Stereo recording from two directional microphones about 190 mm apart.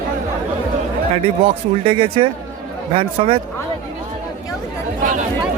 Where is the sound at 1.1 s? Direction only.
30° right (ahead or behind).